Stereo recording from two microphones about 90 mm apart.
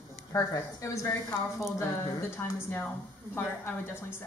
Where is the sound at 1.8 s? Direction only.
30° left (ahead or behind).